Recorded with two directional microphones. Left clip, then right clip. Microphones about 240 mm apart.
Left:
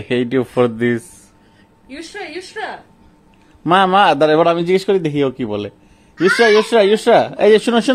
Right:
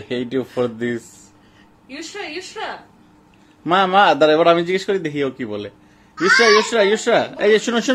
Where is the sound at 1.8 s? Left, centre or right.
Centre.